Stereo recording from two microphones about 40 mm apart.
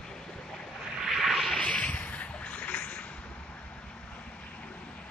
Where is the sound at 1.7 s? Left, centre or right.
Left.